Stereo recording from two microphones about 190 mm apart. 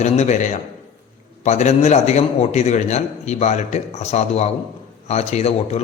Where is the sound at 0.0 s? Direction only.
40° left (ahead or behind).